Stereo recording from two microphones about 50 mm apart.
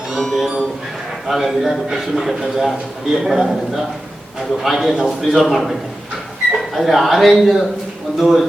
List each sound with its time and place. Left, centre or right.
0.2 s a sound: centre
1.3 s a man's voice: centre
6.7 s a man's voice: centre